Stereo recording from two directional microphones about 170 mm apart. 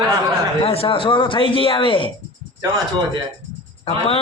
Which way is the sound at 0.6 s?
35° left (ahead or behind).